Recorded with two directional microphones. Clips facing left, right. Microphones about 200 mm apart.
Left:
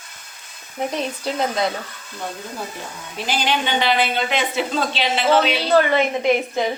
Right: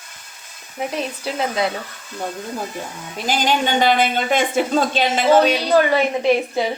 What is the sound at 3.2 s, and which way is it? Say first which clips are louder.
Speech: right 3 dB; 45° right (ahead or behind).